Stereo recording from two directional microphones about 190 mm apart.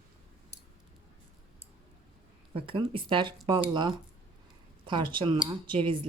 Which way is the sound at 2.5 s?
30° right (ahead or behind).